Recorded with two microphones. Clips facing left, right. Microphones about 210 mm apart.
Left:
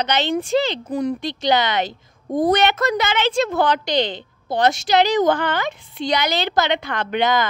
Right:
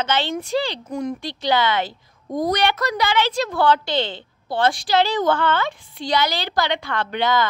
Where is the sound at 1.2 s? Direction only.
20° left (ahead or behind).